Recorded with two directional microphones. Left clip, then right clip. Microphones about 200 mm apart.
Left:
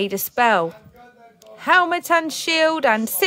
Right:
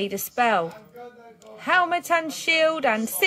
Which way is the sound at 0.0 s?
40° left (ahead or behind).